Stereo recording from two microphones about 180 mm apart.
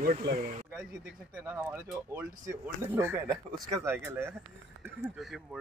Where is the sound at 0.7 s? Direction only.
10° right (ahead or behind).